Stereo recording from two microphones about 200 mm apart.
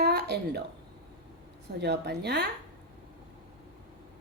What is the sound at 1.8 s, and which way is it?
Speech, 55° right (ahead or behind).